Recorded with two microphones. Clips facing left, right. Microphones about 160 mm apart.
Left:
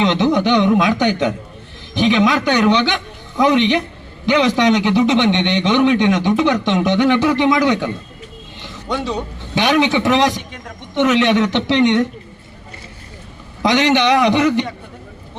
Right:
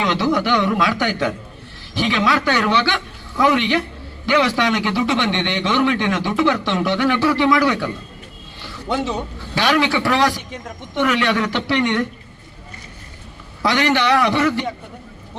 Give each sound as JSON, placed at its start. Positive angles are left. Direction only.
{"t": 0.0, "sound": "a man's voice", "side_deg": 20}
{"t": 8.9, "sound": "speech", "side_deg": -5}
{"t": 9.6, "sound": "a man's voice", "side_deg": 20}
{"t": 13.6, "sound": "a man's voice", "side_deg": 20}